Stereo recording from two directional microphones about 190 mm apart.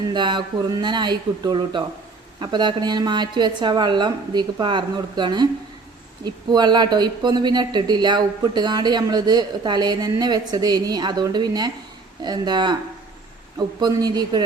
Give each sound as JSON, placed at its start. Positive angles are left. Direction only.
{"t": 0.1, "sound": "speech", "side_deg": -25}